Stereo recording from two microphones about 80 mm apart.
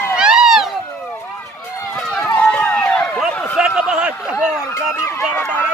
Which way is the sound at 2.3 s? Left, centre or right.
Centre.